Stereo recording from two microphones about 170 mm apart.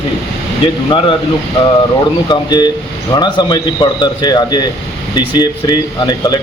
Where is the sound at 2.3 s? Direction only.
25° left (ahead or behind).